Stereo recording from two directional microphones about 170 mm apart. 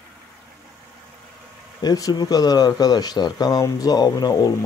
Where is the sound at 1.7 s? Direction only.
20° left (ahead or behind).